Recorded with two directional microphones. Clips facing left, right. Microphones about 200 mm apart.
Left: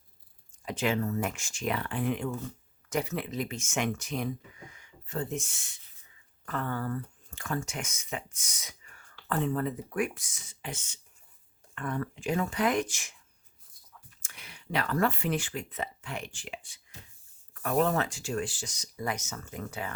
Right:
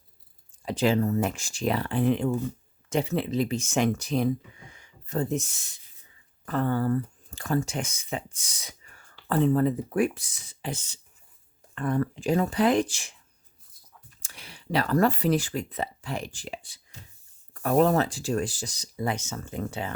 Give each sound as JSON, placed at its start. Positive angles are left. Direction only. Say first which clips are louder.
{"t": 0.6, "sound": "speech", "louder": "right 6 dB", "side_deg": -35}
{"t": 14.2, "sound": "speech", "louder": "right 5 dB", "side_deg": -35}